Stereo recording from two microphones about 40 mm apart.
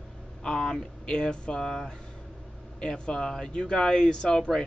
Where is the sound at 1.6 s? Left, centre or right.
Centre.